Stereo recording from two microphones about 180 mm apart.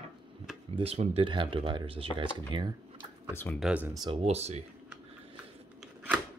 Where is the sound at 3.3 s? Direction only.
10° left (ahead or behind).